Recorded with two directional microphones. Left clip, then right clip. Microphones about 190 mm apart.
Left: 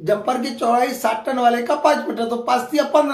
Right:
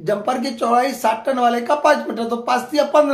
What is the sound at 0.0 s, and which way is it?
Speech, 30° right (ahead or behind).